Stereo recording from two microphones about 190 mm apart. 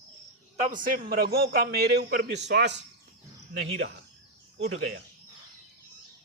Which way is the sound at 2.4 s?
65° right (ahead or behind).